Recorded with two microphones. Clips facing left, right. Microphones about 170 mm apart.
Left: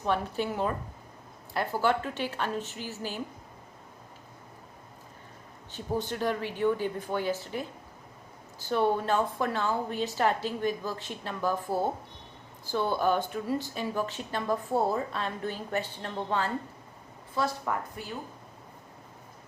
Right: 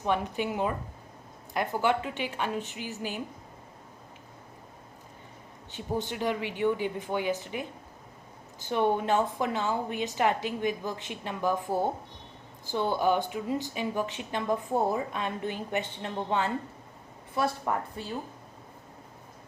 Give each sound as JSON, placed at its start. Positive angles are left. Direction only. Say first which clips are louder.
{"t": 0.0, "sound": "a woman's voice", "louder": "even", "side_deg": -15}
{"t": 1.8, "sound": "a woman's voice", "louder": "left 1 dB", "side_deg": -15}
{"t": 5.7, "sound": "a woman's voice", "louder": "even", "side_deg": -15}